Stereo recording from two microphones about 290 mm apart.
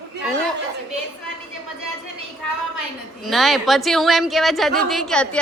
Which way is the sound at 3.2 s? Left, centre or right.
Centre.